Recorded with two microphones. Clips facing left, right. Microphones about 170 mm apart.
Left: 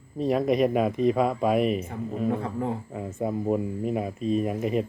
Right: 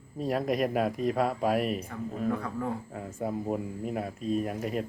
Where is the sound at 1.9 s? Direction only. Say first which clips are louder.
Left 3 dB; 25° left (ahead or behind).